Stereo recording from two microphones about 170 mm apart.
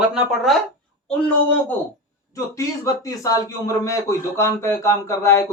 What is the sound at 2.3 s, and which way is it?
A man's voice, 20° left (ahead or behind).